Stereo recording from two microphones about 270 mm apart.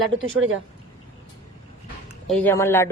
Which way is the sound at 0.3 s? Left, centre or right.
Right.